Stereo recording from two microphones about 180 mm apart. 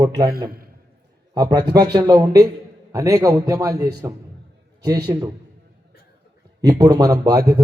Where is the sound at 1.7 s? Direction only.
20° right (ahead or behind).